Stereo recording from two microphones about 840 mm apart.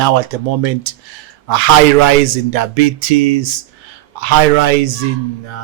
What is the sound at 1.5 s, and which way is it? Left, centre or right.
Speech, right.